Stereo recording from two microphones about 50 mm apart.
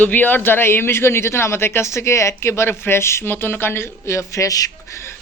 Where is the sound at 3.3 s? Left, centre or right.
Left.